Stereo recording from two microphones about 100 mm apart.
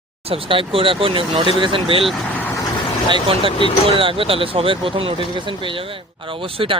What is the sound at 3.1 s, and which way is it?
Speech, 65° right (ahead or behind).